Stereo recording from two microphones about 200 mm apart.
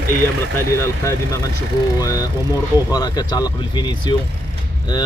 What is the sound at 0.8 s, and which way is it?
Speech, 15° left (ahead or behind).